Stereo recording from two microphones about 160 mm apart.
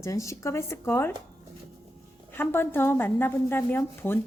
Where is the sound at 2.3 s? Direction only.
15° left (ahead or behind).